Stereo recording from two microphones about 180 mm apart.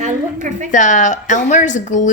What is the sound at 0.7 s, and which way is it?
A woman's voice, 45° left (ahead or behind).